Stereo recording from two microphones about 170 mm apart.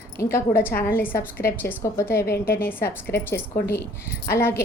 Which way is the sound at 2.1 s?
65° left (ahead or behind).